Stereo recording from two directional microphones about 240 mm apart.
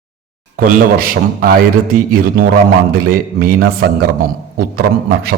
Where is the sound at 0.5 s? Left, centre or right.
Right.